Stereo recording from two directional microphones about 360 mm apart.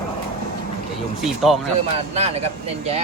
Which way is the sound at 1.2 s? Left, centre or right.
Centre.